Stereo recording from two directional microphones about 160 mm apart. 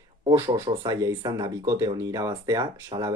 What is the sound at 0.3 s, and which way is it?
Speech, 20° right (ahead or behind).